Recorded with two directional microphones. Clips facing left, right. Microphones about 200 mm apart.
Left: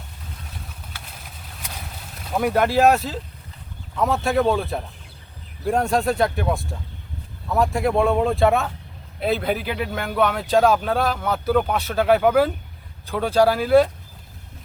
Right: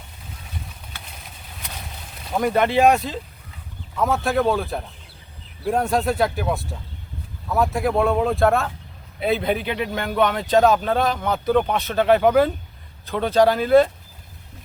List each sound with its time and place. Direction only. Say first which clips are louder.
0.7 s vehicle: even; centre (ahead or behind)
3.9 s a man's voice: even; centre (ahead or behind)